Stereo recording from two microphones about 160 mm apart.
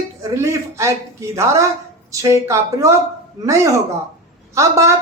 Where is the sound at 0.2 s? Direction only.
20° right (ahead or behind).